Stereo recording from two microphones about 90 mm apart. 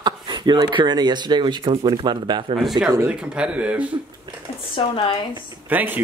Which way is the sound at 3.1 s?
10° right (ahead or behind).